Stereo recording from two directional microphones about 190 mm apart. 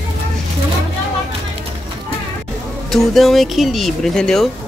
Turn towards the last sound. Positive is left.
turn(degrees=0)  # may be behind; listen again after turning